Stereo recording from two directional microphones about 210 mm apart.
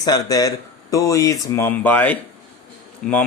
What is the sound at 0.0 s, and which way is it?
Speech, 15° left (ahead or behind).